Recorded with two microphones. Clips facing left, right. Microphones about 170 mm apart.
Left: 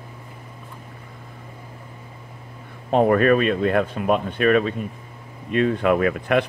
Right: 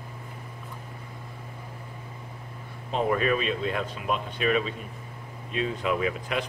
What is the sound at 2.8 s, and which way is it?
Speech, 55° left (ahead or behind).